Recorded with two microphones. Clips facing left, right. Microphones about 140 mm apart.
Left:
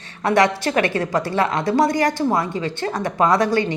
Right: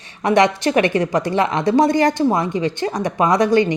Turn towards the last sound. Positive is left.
turn(degrees=-20)  # may be behind; listen again after turning